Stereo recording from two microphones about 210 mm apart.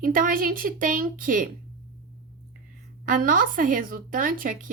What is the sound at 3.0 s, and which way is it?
Speech, 40° right (ahead or behind).